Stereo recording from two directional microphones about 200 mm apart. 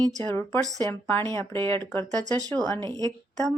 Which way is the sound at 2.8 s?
20° right (ahead or behind).